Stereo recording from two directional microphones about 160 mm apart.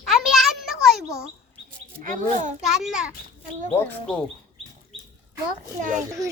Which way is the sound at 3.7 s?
10° left (ahead or behind).